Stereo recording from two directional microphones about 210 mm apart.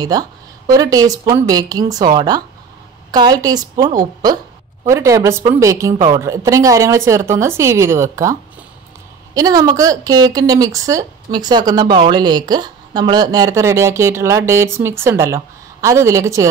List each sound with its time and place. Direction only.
0.0 s a woman's voice: 15° right (ahead or behind)